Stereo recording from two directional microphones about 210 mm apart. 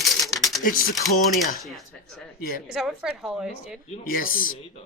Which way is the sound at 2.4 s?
45° left (ahead or behind).